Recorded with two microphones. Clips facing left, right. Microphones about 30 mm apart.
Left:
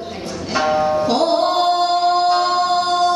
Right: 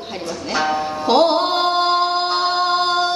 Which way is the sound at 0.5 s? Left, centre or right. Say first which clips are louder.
Left 4 dB; centre.